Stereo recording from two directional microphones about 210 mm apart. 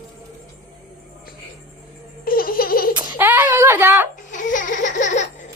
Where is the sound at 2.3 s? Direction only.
45° left (ahead or behind).